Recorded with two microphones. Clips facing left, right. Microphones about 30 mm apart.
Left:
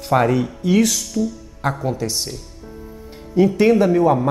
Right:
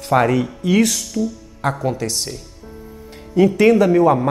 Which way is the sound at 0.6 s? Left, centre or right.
Right.